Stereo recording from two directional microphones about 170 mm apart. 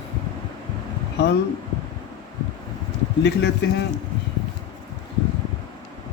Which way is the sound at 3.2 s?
90° left.